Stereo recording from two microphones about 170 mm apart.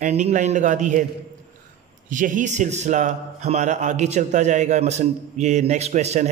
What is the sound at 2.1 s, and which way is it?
A man's voice, 50° right (ahead or behind).